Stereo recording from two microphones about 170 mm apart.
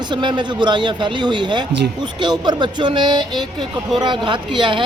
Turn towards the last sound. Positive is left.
turn(degrees=-30)  # may be behind; listen again after turning